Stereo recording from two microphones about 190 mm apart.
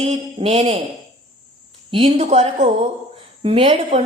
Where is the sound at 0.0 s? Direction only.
35° right (ahead or behind).